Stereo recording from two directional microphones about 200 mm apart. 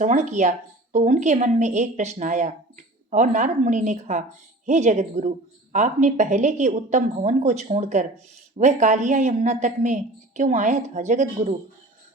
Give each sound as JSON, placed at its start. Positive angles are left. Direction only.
{"t": 0.0, "sound": "speech", "side_deg": -35}